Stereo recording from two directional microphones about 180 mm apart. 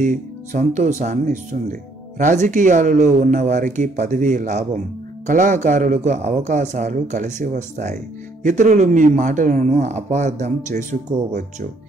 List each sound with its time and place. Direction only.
0.0 s speech: 45° right (ahead or behind)